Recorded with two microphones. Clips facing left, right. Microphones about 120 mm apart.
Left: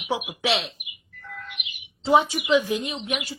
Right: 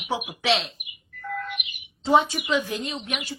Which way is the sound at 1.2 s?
50° right (ahead or behind).